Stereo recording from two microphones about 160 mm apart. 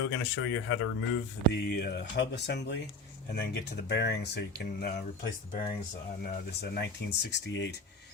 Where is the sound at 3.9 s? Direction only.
90° left.